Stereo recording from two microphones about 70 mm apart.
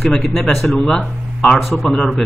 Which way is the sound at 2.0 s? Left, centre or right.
Centre.